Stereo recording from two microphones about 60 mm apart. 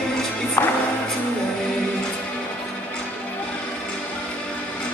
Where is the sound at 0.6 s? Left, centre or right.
Left.